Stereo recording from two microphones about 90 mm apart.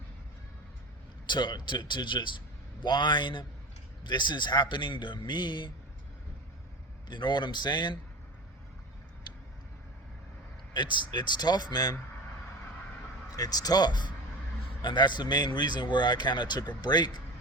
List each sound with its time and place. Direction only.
1.3 s speech: 60° left (ahead or behind)
7.1 s speech: 60° left (ahead or behind)
10.8 s speech: 60° left (ahead or behind)
13.3 s speech: 45° left (ahead or behind)